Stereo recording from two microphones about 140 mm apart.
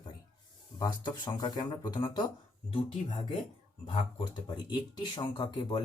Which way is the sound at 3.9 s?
35° left (ahead or behind).